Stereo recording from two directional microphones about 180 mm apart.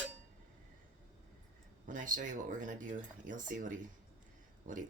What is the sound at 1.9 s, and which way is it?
Speech, 45° right (ahead or behind).